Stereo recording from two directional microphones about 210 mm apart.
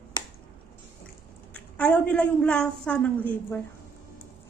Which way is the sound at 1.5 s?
5° left (ahead or behind).